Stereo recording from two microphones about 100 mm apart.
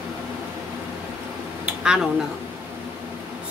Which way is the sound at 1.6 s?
10° right (ahead or behind).